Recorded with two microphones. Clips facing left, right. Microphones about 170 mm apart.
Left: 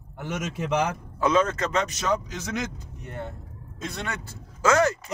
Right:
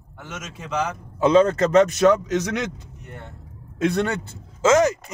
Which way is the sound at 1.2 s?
30° right (ahead or behind).